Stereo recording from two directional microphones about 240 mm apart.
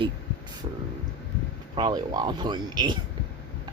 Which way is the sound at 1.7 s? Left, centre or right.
Centre.